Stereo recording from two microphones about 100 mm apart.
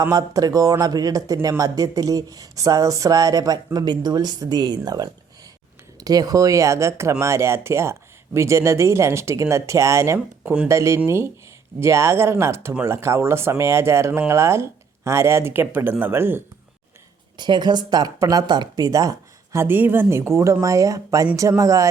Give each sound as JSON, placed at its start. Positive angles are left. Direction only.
{"t": 0.0, "sound": "speech", "side_deg": -35}
{"t": 10.4, "sound": "speech", "side_deg": -10}
{"t": 10.7, "sound": "speech", "side_deg": -30}
{"t": 17.3, "sound": "speech", "side_deg": -50}
{"t": 18.9, "sound": "speech", "side_deg": -35}
{"t": 19.5, "sound": "speech", "side_deg": -20}